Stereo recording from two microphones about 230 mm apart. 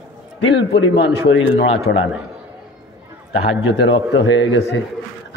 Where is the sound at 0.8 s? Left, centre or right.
Left.